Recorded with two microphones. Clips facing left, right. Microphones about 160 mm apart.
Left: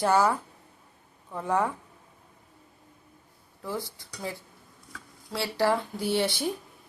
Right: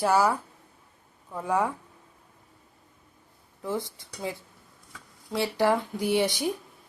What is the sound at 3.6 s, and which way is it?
A woman's voice, 20° right (ahead or behind).